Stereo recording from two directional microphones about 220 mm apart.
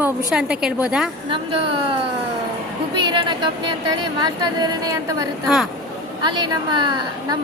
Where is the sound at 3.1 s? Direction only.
20° right (ahead or behind).